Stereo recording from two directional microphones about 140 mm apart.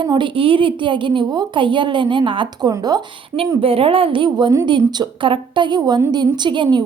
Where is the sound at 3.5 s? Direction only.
40° right (ahead or behind).